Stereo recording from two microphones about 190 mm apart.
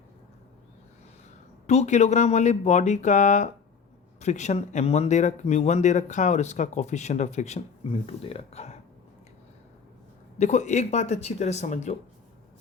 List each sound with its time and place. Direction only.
1.6 s speech: 35° left (ahead or behind)
10.3 s speech: 40° left (ahead or behind)